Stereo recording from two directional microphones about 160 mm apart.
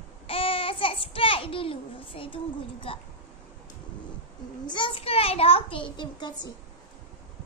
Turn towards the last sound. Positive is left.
turn(degrees=30)  # may be behind; listen again after turning